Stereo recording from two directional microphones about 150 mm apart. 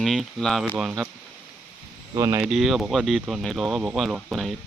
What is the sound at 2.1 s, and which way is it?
Speech, 20° right (ahead or behind).